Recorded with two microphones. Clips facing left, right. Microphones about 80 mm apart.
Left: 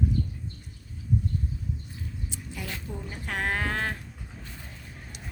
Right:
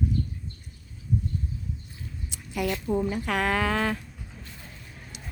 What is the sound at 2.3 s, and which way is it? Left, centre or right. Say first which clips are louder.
Speech: right 12 dB; right.